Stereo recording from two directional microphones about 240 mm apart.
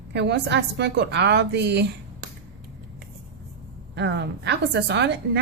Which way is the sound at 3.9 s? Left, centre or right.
Right.